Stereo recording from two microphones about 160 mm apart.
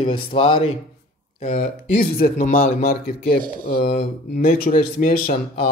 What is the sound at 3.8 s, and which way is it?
Speech, 55° left (ahead or behind).